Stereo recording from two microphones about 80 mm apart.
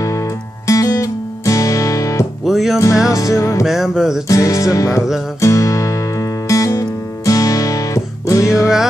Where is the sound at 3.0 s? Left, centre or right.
Left.